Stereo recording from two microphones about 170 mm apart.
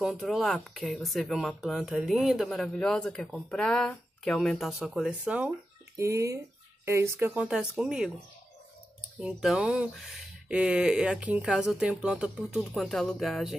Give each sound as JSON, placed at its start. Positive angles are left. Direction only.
{"t": 0.0, "sound": "speech", "side_deg": 0}
{"t": 5.9, "sound": "speech", "side_deg": -15}
{"t": 9.2, "sound": "speech", "side_deg": -5}